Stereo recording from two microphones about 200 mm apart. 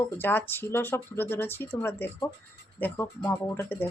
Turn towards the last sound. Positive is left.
turn(degrees=10)  # may be behind; listen again after turning